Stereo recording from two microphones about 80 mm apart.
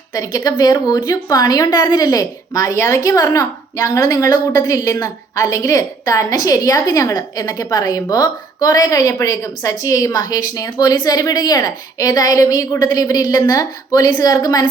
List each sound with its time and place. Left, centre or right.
0.1 s a woman's voice: left